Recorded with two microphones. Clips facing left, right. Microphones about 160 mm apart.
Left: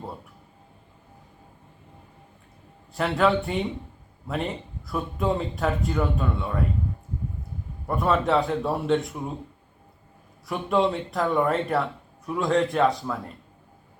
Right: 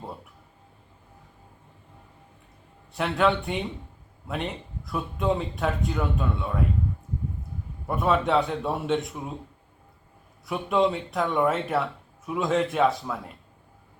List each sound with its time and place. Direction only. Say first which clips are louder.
2.9 s speech: left 2 dB; centre (ahead or behind)
7.9 s speech: left 1 dB; centre (ahead or behind)
10.4 s speech: even; centre (ahead or behind)